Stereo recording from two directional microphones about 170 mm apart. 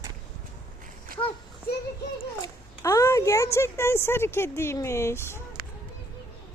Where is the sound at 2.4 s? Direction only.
20° left (ahead or behind).